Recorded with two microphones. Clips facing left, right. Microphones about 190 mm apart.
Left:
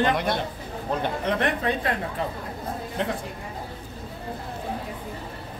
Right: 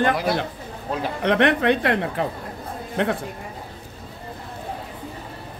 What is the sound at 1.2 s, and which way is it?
Speech, 75° right (ahead or behind).